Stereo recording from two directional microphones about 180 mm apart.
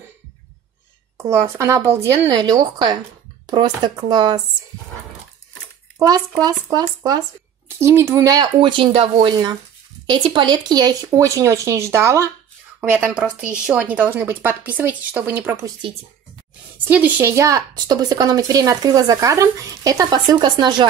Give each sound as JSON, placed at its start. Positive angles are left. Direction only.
{"t": 1.2, "sound": "a woman's voice", "side_deg": -15}
{"t": 5.9, "sound": "a woman's voice", "side_deg": -20}
{"t": 16.8, "sound": "a woman's voice", "side_deg": -10}